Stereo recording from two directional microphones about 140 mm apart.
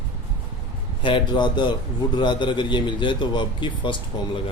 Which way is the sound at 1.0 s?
35° left (ahead or behind).